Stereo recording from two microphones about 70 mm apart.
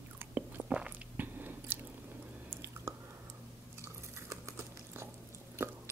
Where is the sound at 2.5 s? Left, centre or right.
Right.